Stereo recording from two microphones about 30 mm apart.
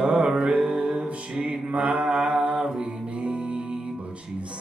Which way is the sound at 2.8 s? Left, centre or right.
Right.